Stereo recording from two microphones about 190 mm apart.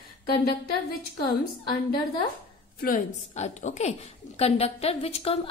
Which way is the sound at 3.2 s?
35° left (ahead or behind).